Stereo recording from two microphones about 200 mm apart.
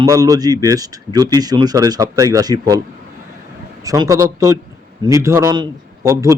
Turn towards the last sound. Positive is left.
turn(degrees=-20)  # may be behind; listen again after turning